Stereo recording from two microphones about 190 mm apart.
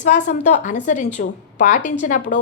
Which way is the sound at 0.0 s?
40° left (ahead or behind).